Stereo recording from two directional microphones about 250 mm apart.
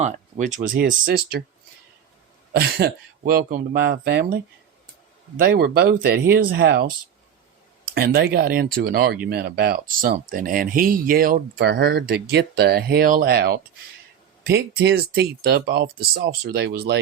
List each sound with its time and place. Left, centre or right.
0.0 s speech: right
2.6 s speech: right
5.4 s speech: right
7.9 s speech: right